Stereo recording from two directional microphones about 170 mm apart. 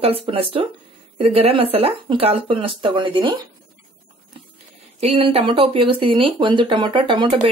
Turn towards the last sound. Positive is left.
turn(degrees=-30)  # may be behind; listen again after turning